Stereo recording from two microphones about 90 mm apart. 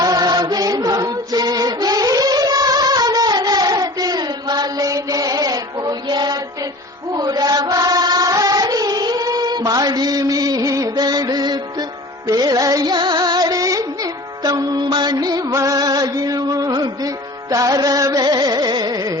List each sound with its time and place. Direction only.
0.0 s music: 45° right (ahead or behind)
7.1 s chant: 45° right (ahead or behind)
12.3 s music: 45° right (ahead or behind)